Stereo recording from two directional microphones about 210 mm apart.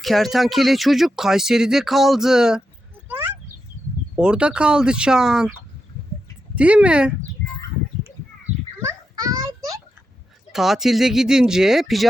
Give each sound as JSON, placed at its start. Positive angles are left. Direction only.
{"t": 0.0, "sound": "speech", "side_deg": 0}
{"t": 3.1, "sound": "a sound", "side_deg": -10}
{"t": 4.2, "sound": "speech", "side_deg": -5}
{"t": 6.6, "sound": "speech", "side_deg": -5}
{"t": 9.4, "sound": "a sound", "side_deg": -15}
{"t": 10.5, "sound": "speech", "side_deg": 0}